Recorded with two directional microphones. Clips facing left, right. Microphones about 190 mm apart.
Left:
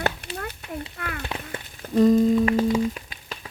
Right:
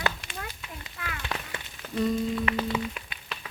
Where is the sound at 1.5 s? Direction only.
35° left (ahead or behind).